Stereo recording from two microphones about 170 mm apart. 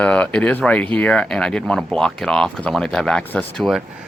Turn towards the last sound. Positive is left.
turn(degrees=5)  # may be behind; listen again after turning